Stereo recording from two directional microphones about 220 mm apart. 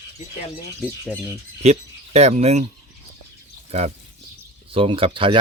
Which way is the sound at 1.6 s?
30° right (ahead or behind).